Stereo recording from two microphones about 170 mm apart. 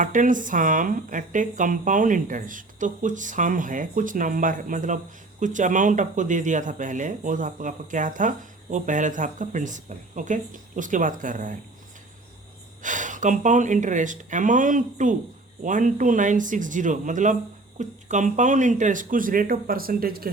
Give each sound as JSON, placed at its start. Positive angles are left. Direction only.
{"t": 0.0, "sound": "speech", "side_deg": -50}
{"t": 12.8, "sound": "speech", "side_deg": -50}